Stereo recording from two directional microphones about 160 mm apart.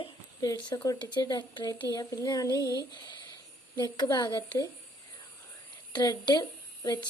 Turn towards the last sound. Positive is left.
turn(degrees=25)  # may be behind; listen again after turning